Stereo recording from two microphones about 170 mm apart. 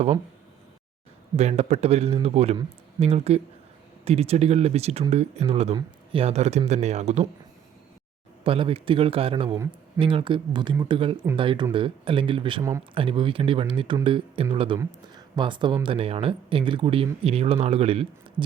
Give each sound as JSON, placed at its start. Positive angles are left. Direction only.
{"t": 1.4, "sound": "speech", "side_deg": -40}
{"t": 8.4, "sound": "speech", "side_deg": -30}